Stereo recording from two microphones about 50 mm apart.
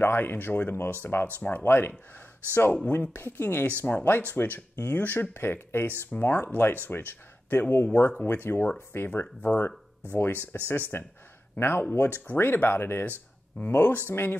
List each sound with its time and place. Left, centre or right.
0.0 s speech: left
6.0 s speech: left
10.1 s speech: left